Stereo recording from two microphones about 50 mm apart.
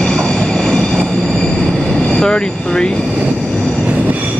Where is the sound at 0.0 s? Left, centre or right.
Centre.